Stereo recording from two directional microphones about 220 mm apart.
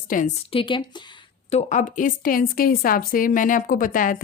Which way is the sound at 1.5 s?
30° left (ahead or behind).